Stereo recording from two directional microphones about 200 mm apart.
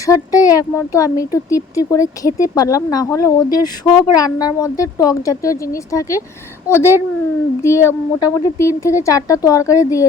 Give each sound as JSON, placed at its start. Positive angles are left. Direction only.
{"t": 0.0, "sound": "a woman's voice", "side_deg": 15}